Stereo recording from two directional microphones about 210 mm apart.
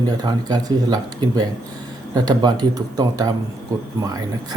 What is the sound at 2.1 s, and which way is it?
A man's voice, 20° right (ahead or behind).